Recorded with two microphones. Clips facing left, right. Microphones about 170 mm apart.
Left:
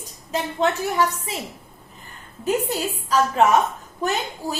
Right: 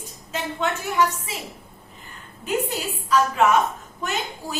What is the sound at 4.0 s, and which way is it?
Speech, 35° left (ahead or behind).